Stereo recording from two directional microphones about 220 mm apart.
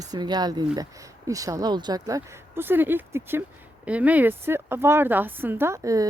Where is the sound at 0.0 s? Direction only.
20° right (ahead or behind).